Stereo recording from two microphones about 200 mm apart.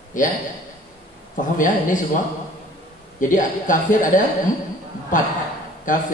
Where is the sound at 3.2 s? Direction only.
40° left (ahead or behind).